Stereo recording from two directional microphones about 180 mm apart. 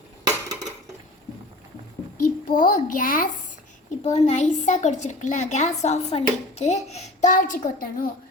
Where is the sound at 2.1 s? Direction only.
50° left (ahead or behind).